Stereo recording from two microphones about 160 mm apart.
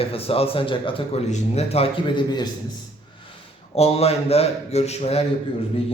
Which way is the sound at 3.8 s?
40° left (ahead or behind).